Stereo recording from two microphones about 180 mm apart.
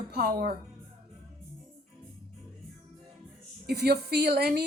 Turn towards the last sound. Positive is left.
turn(degrees=-60)  # may be behind; listen again after turning